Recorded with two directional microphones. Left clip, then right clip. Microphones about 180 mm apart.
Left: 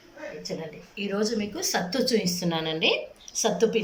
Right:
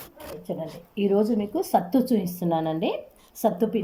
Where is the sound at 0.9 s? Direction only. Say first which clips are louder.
Right 5 dB; 55° right (ahead or behind).